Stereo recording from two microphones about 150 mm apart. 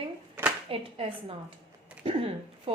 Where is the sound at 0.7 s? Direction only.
40° right (ahead or behind).